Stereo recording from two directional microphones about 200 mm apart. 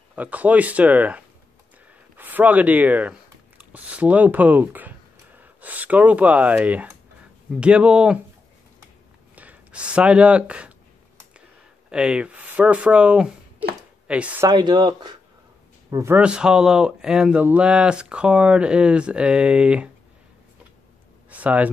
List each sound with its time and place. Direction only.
0.1 s speech: 5° right (ahead or behind)
9.3 s speech: 10° right (ahead or behind)
11.9 s speech: 5° right (ahead or behind)
14.5 s speech: 20° right (ahead or behind); by 19.9 s 5° right (ahead or behind)
21.3 s a sound: 5° right (ahead or behind)